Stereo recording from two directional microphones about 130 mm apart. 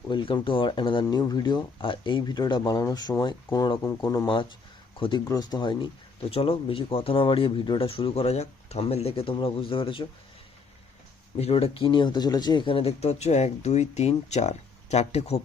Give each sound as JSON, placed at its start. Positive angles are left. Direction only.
{"t": 0.1, "sound": "speech", "side_deg": 35}
{"t": 4.3, "sound": "speech", "side_deg": 40}
{"t": 5.2, "sound": "speech", "side_deg": 30}
{"t": 6.3, "sound": "speech", "side_deg": 45}
{"t": 11.3, "sound": "speech", "side_deg": 50}